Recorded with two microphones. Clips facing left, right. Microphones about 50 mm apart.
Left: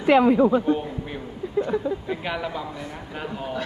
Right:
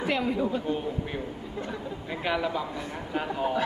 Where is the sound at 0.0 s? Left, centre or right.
Left.